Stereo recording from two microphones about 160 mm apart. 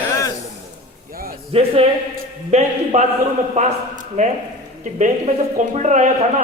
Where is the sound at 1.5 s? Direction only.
40° right (ahead or behind).